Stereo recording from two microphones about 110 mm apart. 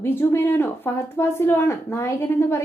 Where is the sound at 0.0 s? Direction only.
20° left (ahead or behind).